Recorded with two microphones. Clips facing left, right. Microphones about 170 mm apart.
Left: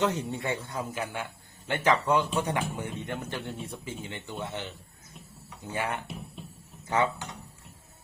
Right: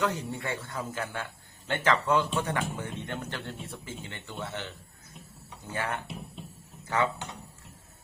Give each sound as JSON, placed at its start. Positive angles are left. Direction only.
{"t": 0.0, "sound": "a man's voice", "side_deg": 20}